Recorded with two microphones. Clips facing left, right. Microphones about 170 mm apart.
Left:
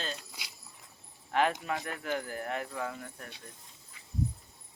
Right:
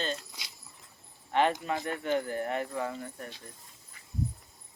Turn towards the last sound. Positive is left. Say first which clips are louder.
# right 3 dB
turn(degrees=-5)  # may be behind; listen again after turning